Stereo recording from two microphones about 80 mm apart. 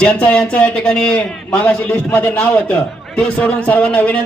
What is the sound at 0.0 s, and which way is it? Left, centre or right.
A man's voice, centre.